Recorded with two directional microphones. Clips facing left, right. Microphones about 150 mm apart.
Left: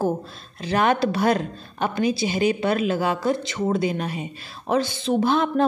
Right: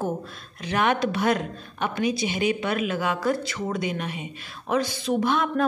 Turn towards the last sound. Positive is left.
turn(degrees=30)  # may be behind; listen again after turning